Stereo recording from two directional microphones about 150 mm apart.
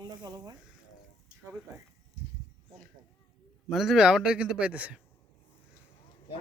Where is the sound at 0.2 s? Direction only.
25° right (ahead or behind).